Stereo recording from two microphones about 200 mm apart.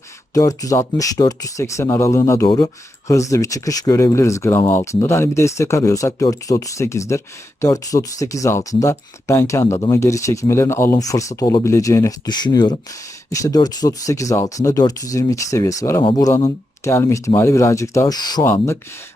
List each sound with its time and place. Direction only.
0.3 s speech: 15° left (ahead or behind)